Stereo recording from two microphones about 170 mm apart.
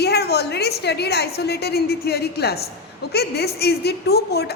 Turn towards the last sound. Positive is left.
turn(degrees=70)  # may be behind; listen again after turning